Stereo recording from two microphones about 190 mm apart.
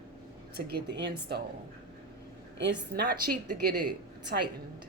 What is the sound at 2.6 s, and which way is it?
A woman's voice, 60° right (ahead or behind).